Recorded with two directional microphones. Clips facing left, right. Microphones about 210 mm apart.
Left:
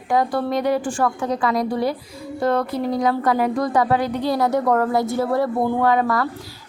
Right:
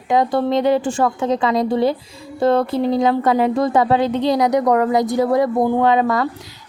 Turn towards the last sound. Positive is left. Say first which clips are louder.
# right 3 dB
turn(degrees=-20)  # may be behind; listen again after turning